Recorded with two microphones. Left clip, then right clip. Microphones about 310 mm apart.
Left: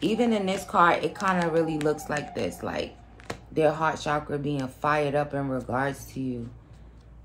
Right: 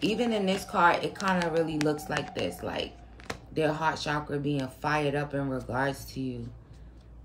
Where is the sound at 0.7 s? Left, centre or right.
Centre.